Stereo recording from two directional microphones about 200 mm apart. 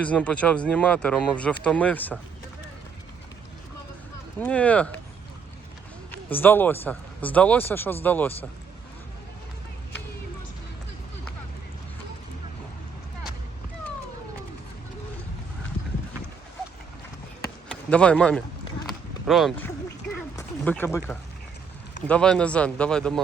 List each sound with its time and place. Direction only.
0.0 s speech: 5° left (ahead or behind)
4.4 s speech: 5° left (ahead or behind)
6.3 s speech: 10° left (ahead or behind)
17.7 s speech: 5° left (ahead or behind)
20.3 s a sound: 10° left (ahead or behind)
22.0 s speech: 5° left (ahead or behind)